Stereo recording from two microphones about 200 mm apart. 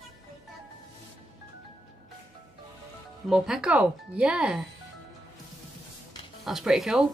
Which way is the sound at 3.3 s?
5° right (ahead or behind).